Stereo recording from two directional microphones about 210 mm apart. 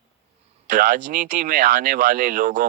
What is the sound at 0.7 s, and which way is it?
Speech, 35° right (ahead or behind).